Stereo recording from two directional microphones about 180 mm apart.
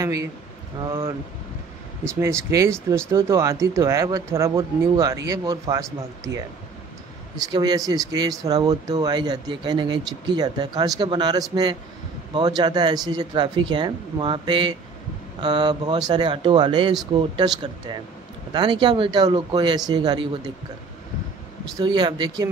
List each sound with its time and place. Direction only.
0.0 s speech: 20° right (ahead or behind)
18.5 s speech: 25° right (ahead or behind)
21.7 s speech: 25° right (ahead or behind)